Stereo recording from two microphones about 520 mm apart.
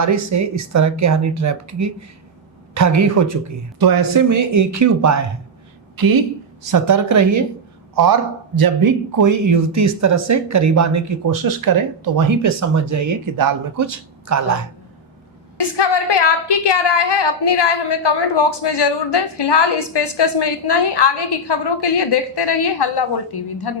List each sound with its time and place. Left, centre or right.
0.0 s speech: right
6.7 s speech: right
8.6 s speech: right
15.5 s a woman's voice: left